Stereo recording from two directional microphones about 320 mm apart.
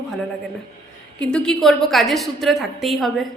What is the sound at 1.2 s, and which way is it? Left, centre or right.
A woman's voice, centre.